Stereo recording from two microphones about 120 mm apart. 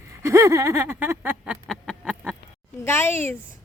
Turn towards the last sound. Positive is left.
turn(degrees=20)  # may be behind; listen again after turning